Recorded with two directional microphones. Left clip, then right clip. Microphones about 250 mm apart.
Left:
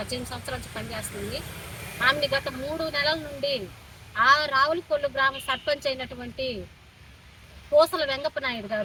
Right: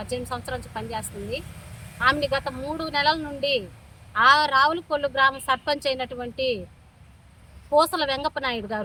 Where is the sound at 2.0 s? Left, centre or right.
Right.